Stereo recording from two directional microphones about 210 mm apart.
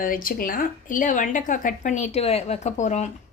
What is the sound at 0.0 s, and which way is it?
A woman's voice, 40° left (ahead or behind).